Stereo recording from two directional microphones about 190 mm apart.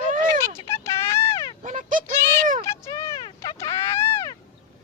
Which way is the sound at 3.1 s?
15° left (ahead or behind).